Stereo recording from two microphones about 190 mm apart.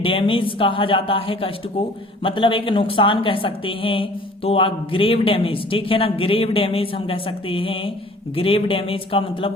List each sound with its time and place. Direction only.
0.0 s speech: 30° left (ahead or behind)